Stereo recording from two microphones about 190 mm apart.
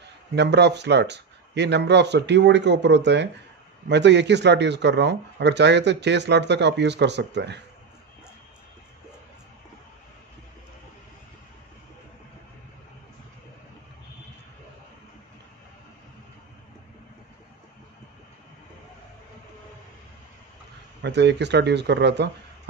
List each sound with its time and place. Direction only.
0.4 s speech: 65° right (ahead or behind)
21.0 s speech: 65° right (ahead or behind)